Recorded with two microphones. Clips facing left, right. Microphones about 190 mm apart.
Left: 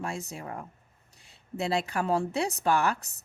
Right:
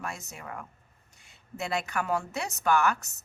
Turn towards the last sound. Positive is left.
turn(degrees=30)  # may be behind; listen again after turning